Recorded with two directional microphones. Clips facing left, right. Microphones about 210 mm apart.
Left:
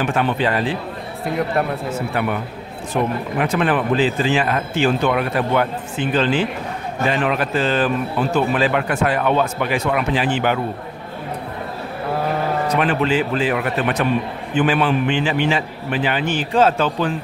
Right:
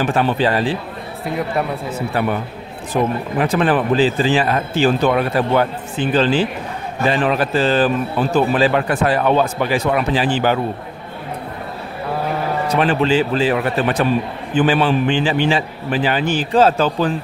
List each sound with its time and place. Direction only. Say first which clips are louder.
0.0 s speech: right 2 dB; 35° right (ahead or behind)
2.2 s speech: right 2 dB; 35° right (ahead or behind)
12.7 s speech: right 4 dB; 30° right (ahead or behind)